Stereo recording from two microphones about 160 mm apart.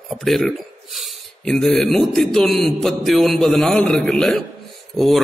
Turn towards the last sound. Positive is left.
turn(degrees=0)  # may be behind; listen again after turning